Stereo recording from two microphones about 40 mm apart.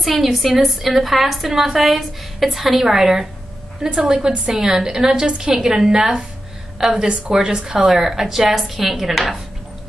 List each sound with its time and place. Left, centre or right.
0.0 s a woman's voice: centre